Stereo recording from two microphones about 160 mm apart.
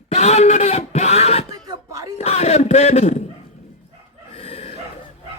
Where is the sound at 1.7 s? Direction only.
20° right (ahead or behind).